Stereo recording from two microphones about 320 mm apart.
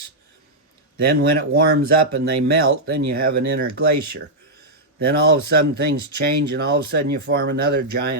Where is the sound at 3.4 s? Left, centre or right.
Right.